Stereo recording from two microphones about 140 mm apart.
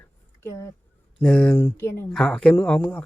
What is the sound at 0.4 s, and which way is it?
Speech, 20° left (ahead or behind).